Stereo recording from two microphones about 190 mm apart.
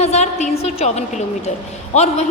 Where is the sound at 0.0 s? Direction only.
35° left (ahead or behind).